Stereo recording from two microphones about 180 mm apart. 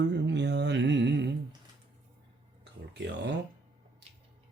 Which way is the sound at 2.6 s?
70° right (ahead or behind).